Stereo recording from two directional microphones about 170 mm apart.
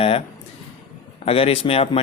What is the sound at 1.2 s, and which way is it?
Speech, 35° left (ahead or behind).